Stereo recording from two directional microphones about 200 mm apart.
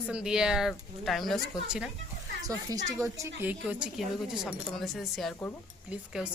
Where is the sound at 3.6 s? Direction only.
5° right (ahead or behind).